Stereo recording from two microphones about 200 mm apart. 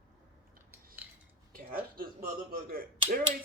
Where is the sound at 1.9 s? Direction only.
50° right (ahead or behind).